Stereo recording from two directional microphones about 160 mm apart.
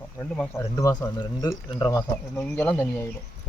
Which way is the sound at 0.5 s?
20° left (ahead or behind).